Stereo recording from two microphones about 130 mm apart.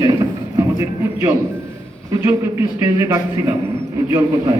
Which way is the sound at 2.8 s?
25° right (ahead or behind).